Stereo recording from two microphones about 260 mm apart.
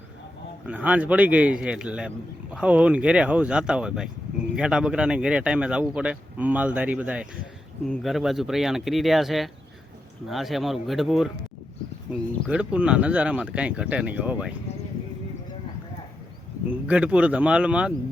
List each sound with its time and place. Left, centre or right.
0.7 s a man's voice: centre
12.5 s a man's voice: centre
16.8 s a man's voice: centre